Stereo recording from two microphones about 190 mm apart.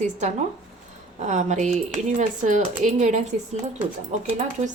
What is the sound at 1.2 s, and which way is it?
Speech, 40° right (ahead or behind).